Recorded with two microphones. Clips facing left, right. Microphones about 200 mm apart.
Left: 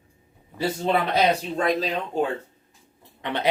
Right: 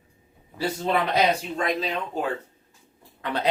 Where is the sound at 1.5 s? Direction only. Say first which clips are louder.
Left 3 dB; 35° left (ahead or behind).